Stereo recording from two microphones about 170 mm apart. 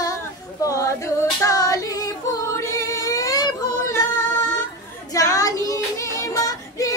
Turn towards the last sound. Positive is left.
turn(degrees=20)  # may be behind; listen again after turning